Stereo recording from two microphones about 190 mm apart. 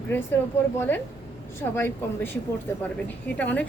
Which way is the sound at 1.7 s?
10° left (ahead or behind).